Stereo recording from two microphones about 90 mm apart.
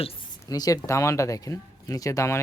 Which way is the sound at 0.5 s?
40° left (ahead or behind).